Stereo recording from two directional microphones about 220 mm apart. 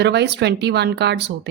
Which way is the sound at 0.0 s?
50° right (ahead or behind).